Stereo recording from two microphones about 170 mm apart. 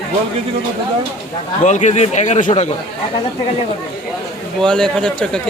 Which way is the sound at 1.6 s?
45° left (ahead or behind).